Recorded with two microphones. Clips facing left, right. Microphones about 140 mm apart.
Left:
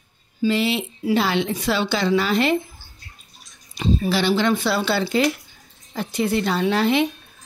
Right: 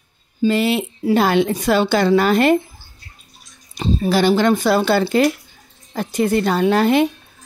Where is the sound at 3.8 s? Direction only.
45° right (ahead or behind).